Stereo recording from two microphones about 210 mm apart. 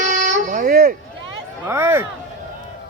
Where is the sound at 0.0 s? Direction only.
35° right (ahead or behind).